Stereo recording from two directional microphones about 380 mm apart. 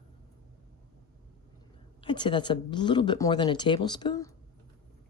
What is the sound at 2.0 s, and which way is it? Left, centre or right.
Speech, centre.